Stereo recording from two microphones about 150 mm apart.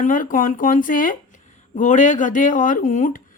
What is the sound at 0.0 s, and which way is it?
A woman's voice, 60° left (ahead or behind).